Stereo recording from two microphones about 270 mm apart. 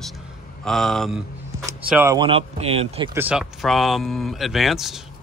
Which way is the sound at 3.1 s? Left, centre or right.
Centre.